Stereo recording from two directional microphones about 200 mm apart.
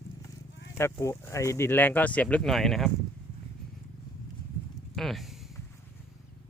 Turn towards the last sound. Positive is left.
turn(degrees=0)  # may be behind; listen again after turning